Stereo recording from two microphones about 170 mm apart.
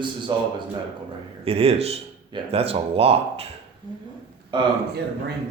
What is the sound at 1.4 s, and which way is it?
Speech, 35° right (ahead or behind).